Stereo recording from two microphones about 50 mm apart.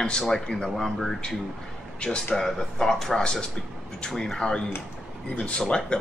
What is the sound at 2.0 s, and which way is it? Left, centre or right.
Speech, left.